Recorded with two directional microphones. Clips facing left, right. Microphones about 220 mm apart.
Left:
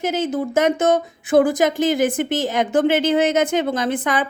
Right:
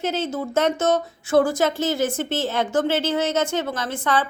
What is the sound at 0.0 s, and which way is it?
A woman's voice, 10° left (ahead or behind).